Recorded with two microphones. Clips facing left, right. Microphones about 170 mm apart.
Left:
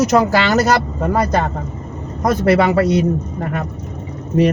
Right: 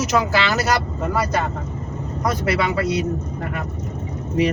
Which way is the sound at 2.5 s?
50° left (ahead or behind).